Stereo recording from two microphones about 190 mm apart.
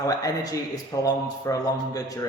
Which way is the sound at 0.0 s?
20° left (ahead or behind).